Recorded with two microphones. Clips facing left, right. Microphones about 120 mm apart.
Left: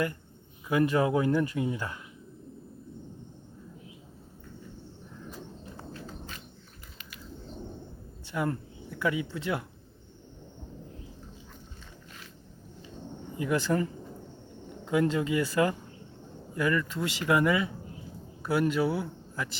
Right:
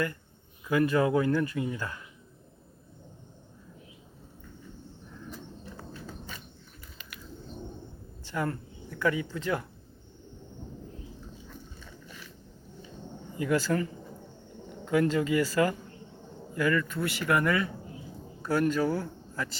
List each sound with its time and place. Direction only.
0.7 s speech: 15° left (ahead or behind)
8.3 s speech: 15° left (ahead or behind)
13.4 s speech: 20° left (ahead or behind)
14.8 s speech: 20° left (ahead or behind)
18.7 s a man's voice: 5° left (ahead or behind)